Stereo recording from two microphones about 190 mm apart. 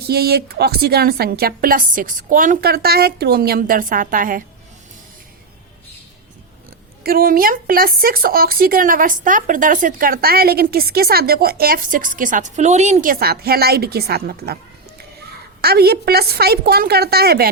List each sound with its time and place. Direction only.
0.1 s speech: 55° right (ahead or behind)
7.0 s speech: 50° right (ahead or behind)
15.6 s a woman's voice: 55° right (ahead or behind)